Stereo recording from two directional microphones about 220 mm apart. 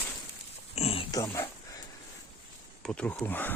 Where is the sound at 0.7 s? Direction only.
25° left (ahead or behind).